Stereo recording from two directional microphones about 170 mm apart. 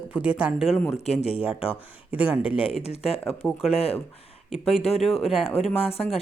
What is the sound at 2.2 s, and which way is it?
Speech, 10° right (ahead or behind).